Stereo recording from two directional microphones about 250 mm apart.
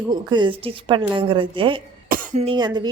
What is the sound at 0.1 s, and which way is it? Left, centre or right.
A woman's voice, centre.